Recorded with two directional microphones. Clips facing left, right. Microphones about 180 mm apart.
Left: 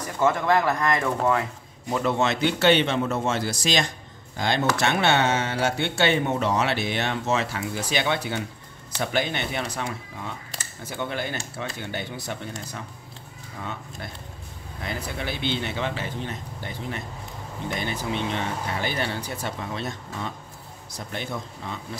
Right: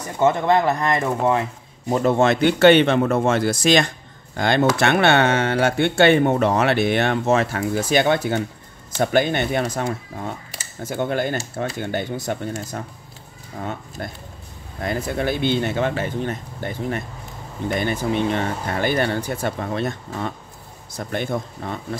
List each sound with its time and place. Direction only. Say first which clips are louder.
0.2 s speech: right 4 dB; 25° right (ahead or behind)
1.9 s speech: right 6 dB; 40° right (ahead or behind)
13.6 s speech: right 6 dB; 45° right (ahead or behind)